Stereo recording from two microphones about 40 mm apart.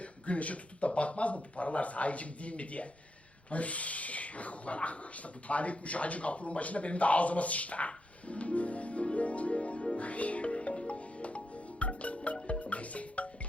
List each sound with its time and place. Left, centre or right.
0.0 s speech: left
10.0 s music: left